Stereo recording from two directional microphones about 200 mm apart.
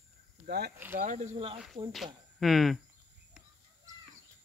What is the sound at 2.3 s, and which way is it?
Speech, centre (ahead or behind).